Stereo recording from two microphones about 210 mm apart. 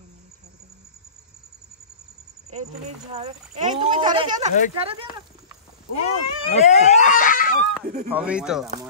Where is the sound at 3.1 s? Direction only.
30° right (ahead or behind).